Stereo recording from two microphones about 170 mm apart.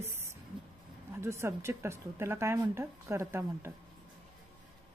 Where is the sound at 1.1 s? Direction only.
15° right (ahead or behind).